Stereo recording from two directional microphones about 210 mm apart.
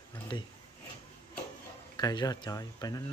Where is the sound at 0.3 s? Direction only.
20° left (ahead or behind).